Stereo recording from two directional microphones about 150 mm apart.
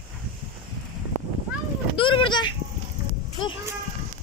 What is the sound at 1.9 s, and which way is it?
Speech, 35° left (ahead or behind).